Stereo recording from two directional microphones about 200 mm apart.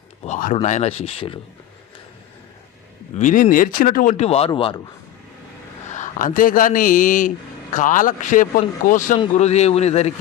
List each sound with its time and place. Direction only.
0.3 s a man's voice: 40° left (ahead or behind)
3.2 s a man's voice: 35° left (ahead or behind)
5.9 s a man's voice: 40° left (ahead or behind)